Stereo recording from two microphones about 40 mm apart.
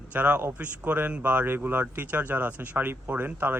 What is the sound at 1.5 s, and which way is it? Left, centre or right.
Speech, right.